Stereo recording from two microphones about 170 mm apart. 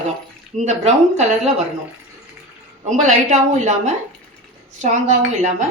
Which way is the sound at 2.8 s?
45° right (ahead or behind).